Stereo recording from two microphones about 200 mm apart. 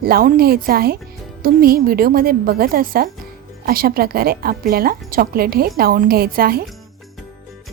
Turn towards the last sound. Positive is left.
turn(degrees=-50)  # may be behind; listen again after turning